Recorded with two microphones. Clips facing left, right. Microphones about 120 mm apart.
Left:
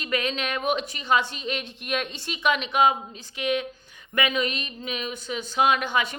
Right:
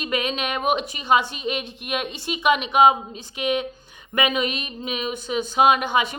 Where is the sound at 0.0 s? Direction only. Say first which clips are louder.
Right 2 dB; 15° right (ahead or behind).